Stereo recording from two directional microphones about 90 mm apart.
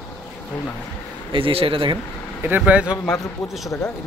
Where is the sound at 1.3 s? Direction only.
85° right.